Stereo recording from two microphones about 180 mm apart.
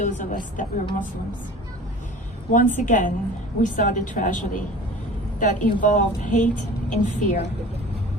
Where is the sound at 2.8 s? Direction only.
45° left (ahead or behind).